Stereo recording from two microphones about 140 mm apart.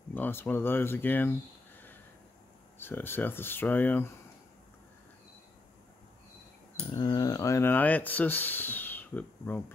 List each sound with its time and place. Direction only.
0.1 s speech: 15° left (ahead or behind)
2.8 s speech: 15° left (ahead or behind)
6.9 s speech: 30° left (ahead or behind)